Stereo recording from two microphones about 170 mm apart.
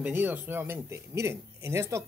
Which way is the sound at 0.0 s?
10° right (ahead or behind).